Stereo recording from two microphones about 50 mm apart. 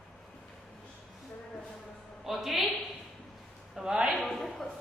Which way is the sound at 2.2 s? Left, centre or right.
Centre.